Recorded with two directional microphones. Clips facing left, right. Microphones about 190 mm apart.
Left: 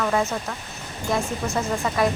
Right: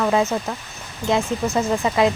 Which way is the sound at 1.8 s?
20° right (ahead or behind).